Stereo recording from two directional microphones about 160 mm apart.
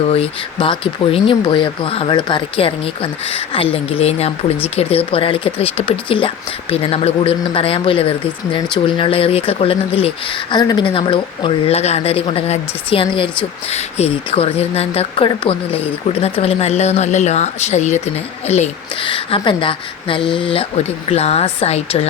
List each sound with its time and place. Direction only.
0.1 s speech: 35° left (ahead or behind)
10.5 s speech: 25° left (ahead or behind)